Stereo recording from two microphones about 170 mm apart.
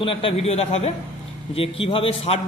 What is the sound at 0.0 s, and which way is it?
A man's voice, 30° left (ahead or behind).